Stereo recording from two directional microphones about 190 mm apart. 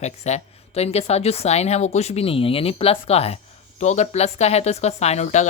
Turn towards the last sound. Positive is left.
turn(degrees=35)  # may be behind; listen again after turning